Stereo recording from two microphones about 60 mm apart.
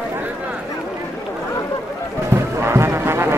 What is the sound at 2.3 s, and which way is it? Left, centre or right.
Music, right.